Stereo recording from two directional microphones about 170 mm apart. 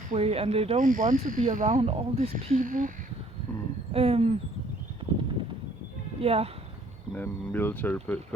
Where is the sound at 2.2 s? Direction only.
55° right (ahead or behind).